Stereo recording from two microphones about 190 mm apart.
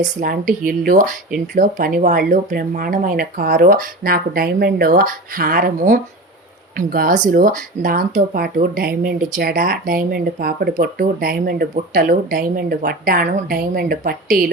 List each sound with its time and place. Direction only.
0.0 s speech: 45° right (ahead or behind)